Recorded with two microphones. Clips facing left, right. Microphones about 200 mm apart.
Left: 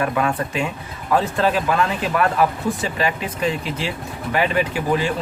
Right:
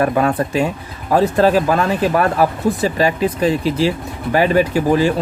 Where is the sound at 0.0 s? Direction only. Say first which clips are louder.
Right 5 dB; 35° right (ahead or behind).